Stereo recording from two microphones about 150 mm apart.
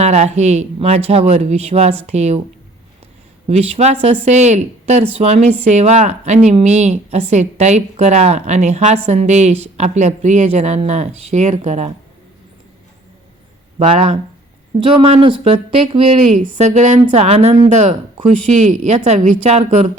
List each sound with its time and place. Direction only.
0.0 s speech: 50° right (ahead or behind)
3.4 s speech: 45° right (ahead or behind)
13.7 s speech: 45° right (ahead or behind)
16.1 s speech: 55° right (ahead or behind)